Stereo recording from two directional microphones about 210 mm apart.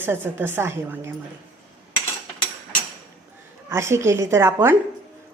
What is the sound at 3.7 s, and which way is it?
A woman's voice, 15° right (ahead or behind).